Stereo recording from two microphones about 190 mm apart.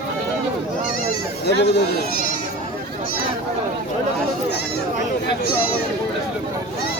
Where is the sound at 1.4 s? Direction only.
60° left (ahead or behind).